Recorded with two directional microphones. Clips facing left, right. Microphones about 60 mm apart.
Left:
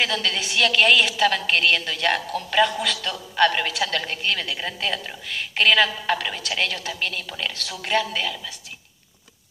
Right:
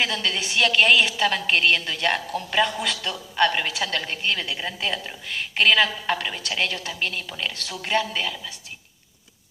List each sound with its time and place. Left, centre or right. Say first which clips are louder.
0.0 s a woman's voice: left 1 dB; right
7.2 s a woman's voice: left 1 dB; centre